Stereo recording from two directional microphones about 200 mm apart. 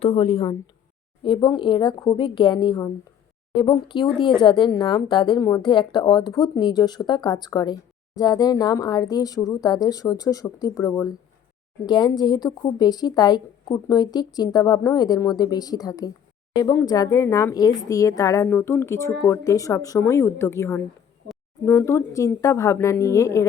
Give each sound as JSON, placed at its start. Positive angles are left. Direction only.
{"t": 0.0, "sound": "a woman's voice", "side_deg": 30}